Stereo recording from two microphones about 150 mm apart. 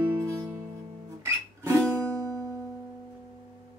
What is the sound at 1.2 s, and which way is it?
Guitar, 20° right (ahead or behind).